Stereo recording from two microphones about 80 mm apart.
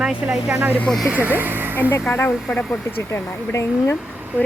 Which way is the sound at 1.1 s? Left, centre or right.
Right.